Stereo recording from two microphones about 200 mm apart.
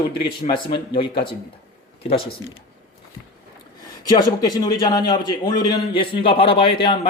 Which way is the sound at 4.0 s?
20° left (ahead or behind).